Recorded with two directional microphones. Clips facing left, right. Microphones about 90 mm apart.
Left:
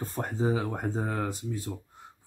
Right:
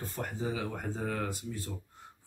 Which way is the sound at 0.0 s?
35° left (ahead or behind).